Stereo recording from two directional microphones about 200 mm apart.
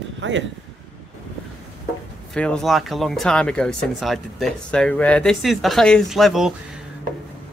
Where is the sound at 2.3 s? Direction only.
5° left (ahead or behind).